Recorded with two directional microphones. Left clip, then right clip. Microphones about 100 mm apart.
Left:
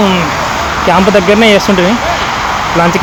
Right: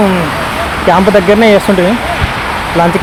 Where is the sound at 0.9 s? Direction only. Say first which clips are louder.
Right 1 dB; 10° left (ahead or behind).